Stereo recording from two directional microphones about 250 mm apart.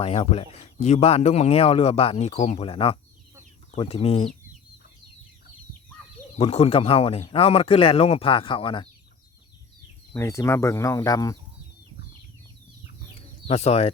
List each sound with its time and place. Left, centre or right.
0.0 s speech: left
6.3 s speech: left
10.1 s speech: centre
13.5 s speech: left